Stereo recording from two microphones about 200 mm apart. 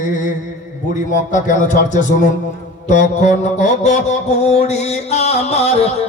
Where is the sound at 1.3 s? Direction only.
40° left (ahead or behind).